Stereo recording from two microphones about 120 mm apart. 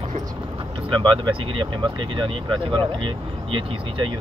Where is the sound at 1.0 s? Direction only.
45° right (ahead or behind).